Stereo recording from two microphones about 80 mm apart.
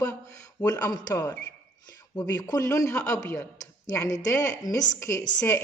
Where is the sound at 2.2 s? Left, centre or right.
Left.